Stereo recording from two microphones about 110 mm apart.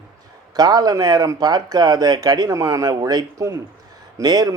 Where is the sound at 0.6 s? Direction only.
35° right (ahead or behind).